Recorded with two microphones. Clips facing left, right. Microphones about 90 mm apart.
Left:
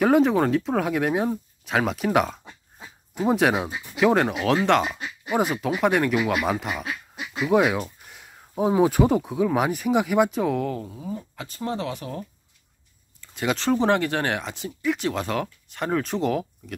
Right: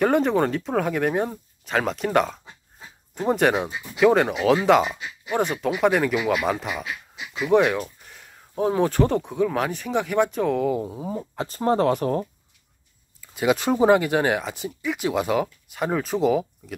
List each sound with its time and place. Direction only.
0.0 s speech: centre (ahead or behind)
10.8 s speech: 30° right (ahead or behind)
13.2 s speech: 5° right (ahead or behind)